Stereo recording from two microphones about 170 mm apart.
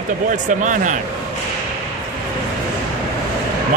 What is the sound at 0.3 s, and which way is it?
Speech, 50° right (ahead or behind).